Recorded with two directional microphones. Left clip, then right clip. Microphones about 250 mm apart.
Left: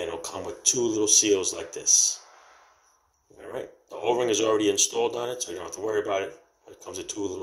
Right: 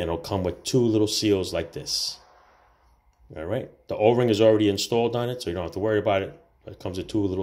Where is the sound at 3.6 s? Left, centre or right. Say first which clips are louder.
Right 10 dB; centre.